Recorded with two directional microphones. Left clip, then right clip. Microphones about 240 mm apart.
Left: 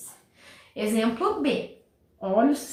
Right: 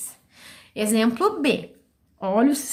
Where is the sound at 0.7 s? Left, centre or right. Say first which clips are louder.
Right 4 dB; right.